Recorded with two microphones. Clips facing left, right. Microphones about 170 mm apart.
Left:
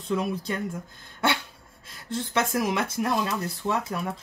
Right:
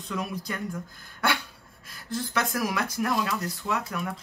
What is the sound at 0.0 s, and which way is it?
Speech, 30° left (ahead or behind).